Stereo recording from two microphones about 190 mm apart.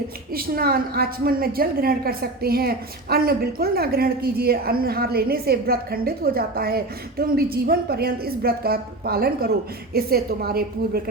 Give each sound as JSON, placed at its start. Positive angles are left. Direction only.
{"t": 0.3, "sound": "a woman's voice", "side_deg": -50}